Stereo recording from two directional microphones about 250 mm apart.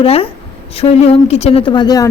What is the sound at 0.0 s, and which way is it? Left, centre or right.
A woman's voice, left.